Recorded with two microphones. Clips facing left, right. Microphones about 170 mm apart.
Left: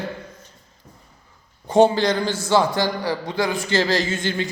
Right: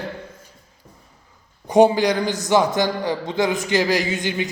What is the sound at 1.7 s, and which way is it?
A man's voice, 15° right (ahead or behind).